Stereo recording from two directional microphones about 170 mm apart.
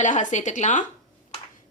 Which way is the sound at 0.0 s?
45° left (ahead or behind).